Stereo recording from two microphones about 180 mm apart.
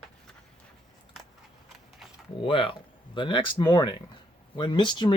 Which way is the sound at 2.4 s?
30° left (ahead or behind).